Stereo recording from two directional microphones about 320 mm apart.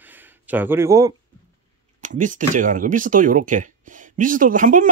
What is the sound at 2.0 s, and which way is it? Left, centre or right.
Speech, right.